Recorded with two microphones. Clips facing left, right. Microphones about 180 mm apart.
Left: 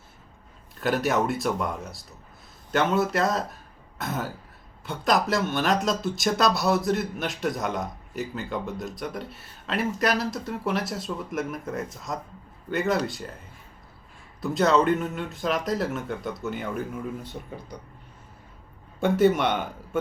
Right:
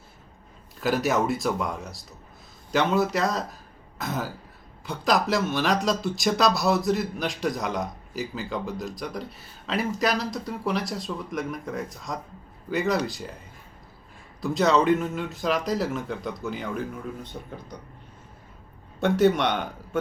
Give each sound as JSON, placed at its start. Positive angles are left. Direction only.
{"t": 0.8, "sound": "speech", "side_deg": 0}
{"t": 14.4, "sound": "speech", "side_deg": 0}
{"t": 18.9, "sound": "a man's voice", "side_deg": 5}